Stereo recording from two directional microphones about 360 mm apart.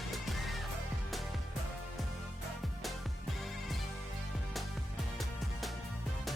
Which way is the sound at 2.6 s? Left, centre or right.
Centre.